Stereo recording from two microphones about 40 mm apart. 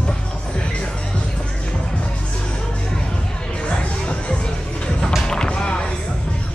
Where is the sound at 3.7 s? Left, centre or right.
Left.